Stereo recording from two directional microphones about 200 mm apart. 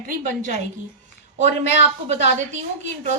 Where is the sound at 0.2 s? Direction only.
40° right (ahead or behind).